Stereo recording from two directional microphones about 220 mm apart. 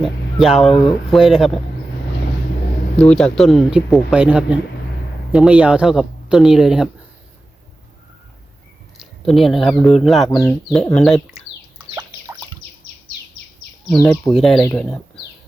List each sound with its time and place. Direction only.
0.0 s speech: centre (ahead or behind)
3.0 s speech: 5° left (ahead or behind)
9.0 s speech: centre (ahead or behind)
10.2 s speech: 15° left (ahead or behind)
10.9 s speech: 5° left (ahead or behind)
11.9 s bird: 10° right (ahead or behind)
13.9 s speech: 10° left (ahead or behind)